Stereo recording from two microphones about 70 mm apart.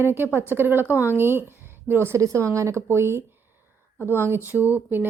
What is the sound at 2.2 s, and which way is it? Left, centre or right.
Speech, right.